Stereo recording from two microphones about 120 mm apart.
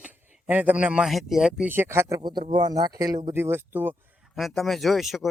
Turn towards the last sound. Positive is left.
turn(degrees=0)  # may be behind; listen again after turning